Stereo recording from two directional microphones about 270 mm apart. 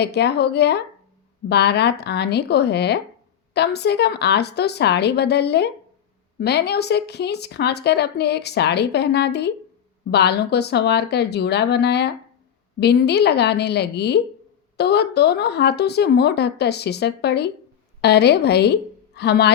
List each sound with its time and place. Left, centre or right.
0.0 s a woman's voice: left